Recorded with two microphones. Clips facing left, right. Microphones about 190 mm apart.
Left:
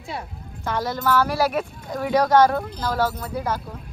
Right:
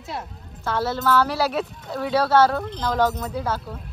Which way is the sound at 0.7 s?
15° left (ahead or behind).